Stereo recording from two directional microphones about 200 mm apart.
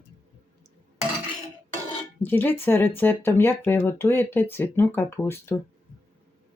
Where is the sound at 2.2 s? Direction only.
10° left (ahead or behind).